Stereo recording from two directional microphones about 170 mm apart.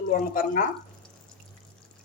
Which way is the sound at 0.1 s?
55° left (ahead or behind).